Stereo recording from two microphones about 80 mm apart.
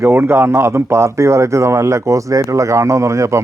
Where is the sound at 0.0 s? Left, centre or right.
Right.